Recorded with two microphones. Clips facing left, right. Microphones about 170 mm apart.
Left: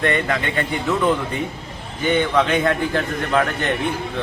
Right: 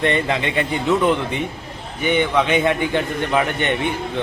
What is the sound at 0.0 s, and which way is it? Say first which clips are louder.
Speech: right 1 dB; 30° right (ahead or behind).